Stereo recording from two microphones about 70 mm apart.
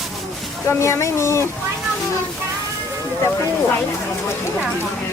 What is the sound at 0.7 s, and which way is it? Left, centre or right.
Speech, left.